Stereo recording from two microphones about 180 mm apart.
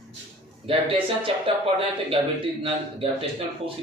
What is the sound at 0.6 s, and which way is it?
Speech, 30° right (ahead or behind).